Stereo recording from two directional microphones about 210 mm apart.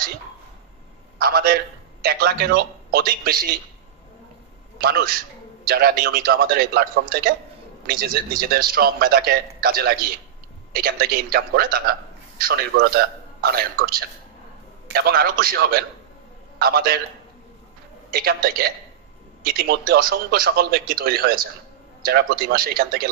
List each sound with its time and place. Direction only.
1.1 s a man's voice: 50° right (ahead or behind)
4.8 s a man's voice: 45° right (ahead or behind)
18.1 s a man's voice: 45° right (ahead or behind)